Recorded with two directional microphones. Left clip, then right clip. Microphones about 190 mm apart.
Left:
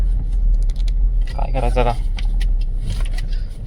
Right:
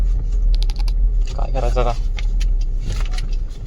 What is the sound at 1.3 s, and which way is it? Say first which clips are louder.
Speech: left 2 dB; 10° left (ahead or behind).